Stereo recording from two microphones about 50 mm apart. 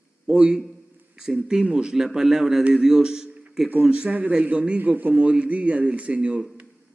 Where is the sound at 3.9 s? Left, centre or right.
Right.